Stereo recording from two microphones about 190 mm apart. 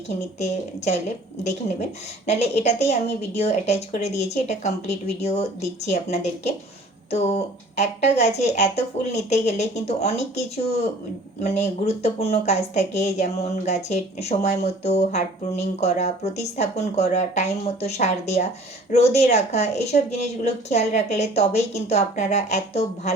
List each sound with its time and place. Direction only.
0.3 s a woman's voice: 35° left (ahead or behind)
2.2 s a woman's voice: 35° left (ahead or behind)